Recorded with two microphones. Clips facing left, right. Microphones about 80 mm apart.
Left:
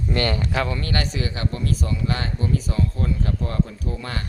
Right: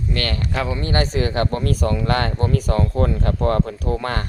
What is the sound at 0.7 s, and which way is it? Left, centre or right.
Speech, right.